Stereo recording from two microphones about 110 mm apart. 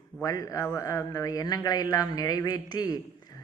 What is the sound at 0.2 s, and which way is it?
A man's voice, 30° left (ahead or behind).